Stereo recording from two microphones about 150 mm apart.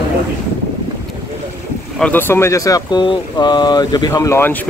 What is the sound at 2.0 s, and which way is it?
Speech, 10° left (ahead or behind).